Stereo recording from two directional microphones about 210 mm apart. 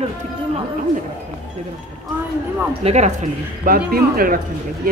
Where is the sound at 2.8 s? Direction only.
30° right (ahead or behind).